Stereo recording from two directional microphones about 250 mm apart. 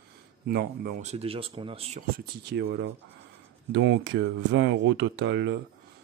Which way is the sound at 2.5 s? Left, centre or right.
Right.